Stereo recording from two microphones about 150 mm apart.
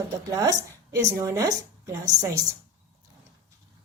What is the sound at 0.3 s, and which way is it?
A woman's voice, 25° right (ahead or behind).